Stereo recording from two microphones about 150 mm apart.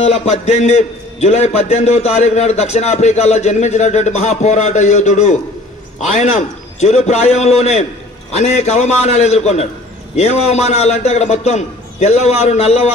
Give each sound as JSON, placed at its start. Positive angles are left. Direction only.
{"t": 0.0, "sound": "a man's voice", "side_deg": 45}